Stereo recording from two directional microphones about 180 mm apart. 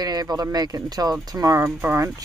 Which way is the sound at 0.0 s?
20° right (ahead or behind).